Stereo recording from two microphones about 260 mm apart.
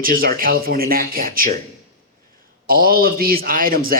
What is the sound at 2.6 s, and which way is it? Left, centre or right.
A man's voice, right.